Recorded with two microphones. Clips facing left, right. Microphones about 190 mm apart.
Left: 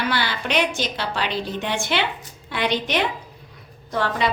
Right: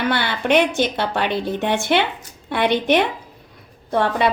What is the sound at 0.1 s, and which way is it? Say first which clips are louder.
A woman's voice: right 6 dB; 55° right (ahead or behind).